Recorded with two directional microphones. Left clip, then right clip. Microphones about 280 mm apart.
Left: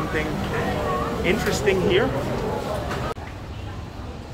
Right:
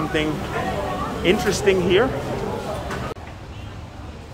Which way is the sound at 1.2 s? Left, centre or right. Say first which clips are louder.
Right 5 dB; right.